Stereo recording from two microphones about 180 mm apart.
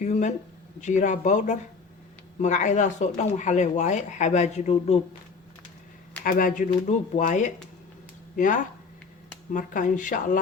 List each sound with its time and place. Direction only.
0.0 s speech: 40° left (ahead or behind)
6.2 s speech: 50° left (ahead or behind)